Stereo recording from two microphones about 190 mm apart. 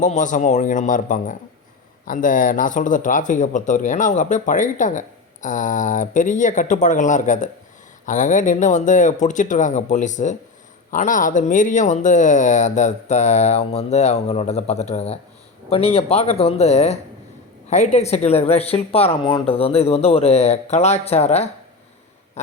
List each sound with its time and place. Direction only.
0.0 s speech: 40° left (ahead or behind)